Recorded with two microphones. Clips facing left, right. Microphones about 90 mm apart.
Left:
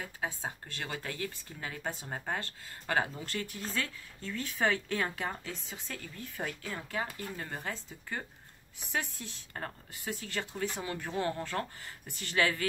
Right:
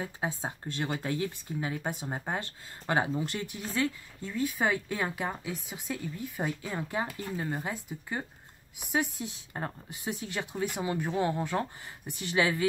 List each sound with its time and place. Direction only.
0.0 s speech: 20° right (ahead or behind)